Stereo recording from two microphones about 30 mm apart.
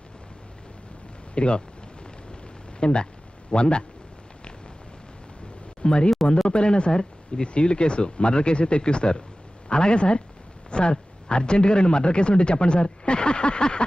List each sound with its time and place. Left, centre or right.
1.4 s a man's voice: left
2.8 s a man's voice: left
5.8 s a man's voice: left